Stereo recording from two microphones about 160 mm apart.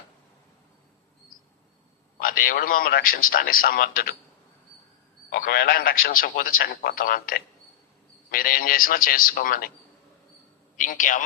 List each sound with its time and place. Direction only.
2.1 s a man's voice: 60° left (ahead or behind)
5.3 s a man's voice: 75° left (ahead or behind)
10.8 s a man's voice: 55° left (ahead or behind)